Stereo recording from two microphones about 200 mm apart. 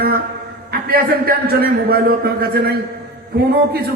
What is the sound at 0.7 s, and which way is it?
A man's voice, 50° right (ahead or behind).